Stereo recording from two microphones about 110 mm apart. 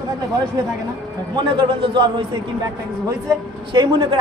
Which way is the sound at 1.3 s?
45° right (ahead or behind).